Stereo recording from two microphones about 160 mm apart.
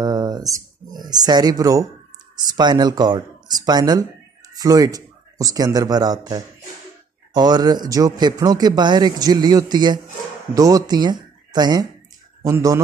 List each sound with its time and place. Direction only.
0.0 s a sound: 25° right (ahead or behind)
2.3 s speech: 25° right (ahead or behind)
7.3 s a man's voice: 25° right (ahead or behind)